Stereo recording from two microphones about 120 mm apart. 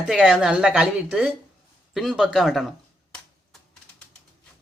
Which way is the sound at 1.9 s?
5° right (ahead or behind).